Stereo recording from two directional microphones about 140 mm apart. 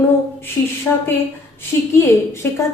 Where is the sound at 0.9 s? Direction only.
15° left (ahead or behind).